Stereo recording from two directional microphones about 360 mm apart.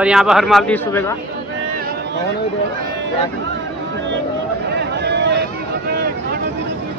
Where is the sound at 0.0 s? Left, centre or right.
Centre.